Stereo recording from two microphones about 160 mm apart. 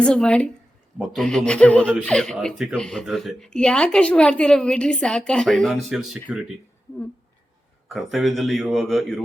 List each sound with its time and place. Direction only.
0.0 s speech: 5° left (ahead or behind)
7.9 s speech: centre (ahead or behind)